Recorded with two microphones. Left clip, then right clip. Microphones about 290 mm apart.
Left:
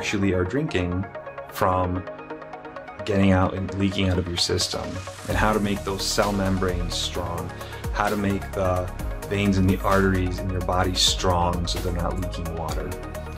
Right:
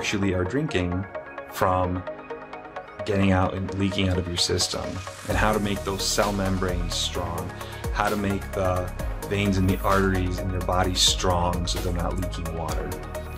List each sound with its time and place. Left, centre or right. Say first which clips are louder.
0.0 s speech: left 2 dB; centre
3.1 s speech: left 2 dB; centre